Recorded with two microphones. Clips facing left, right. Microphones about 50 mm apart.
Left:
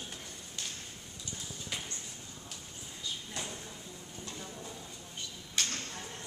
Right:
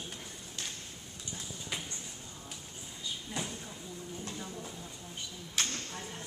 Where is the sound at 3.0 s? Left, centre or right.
Centre.